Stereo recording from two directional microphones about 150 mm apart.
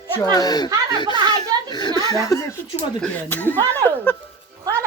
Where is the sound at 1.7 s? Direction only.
25° left (ahead or behind).